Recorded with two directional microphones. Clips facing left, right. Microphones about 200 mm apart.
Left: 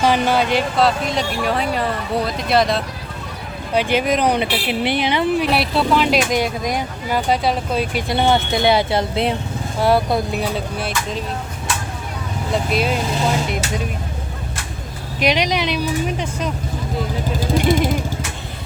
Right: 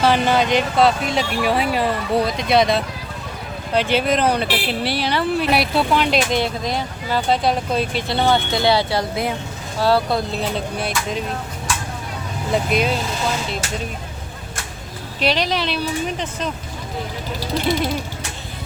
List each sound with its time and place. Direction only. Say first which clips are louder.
0.0 s speech: even; 10° left (ahead or behind)
3.8 s speech: left 1 dB; 10° left (ahead or behind)
5.5 s speech: even; centre (ahead or behind); by 10.4 s 20° left (ahead or behind)
10.8 s speech: even; centre (ahead or behind)
15.2 s speech: left 2 dB; 15° left (ahead or behind)
17.4 s speech: left 3 dB; 50° left (ahead or behind)